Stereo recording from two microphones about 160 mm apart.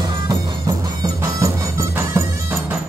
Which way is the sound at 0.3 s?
25° right (ahead or behind).